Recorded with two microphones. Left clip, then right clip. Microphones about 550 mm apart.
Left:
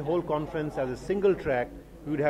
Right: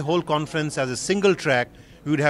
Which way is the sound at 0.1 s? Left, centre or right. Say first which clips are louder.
Right 6 dB; right.